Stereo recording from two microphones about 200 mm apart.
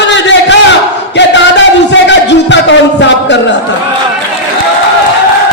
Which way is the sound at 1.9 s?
60° left (ahead or behind).